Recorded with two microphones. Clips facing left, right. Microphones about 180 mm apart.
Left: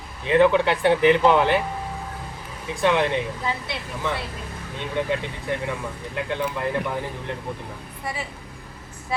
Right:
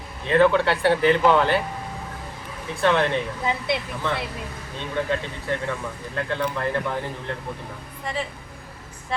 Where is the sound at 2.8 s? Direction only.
15° left (ahead or behind).